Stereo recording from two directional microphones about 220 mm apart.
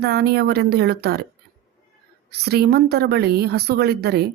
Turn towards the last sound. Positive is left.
turn(degrees=-45)  # may be behind; listen again after turning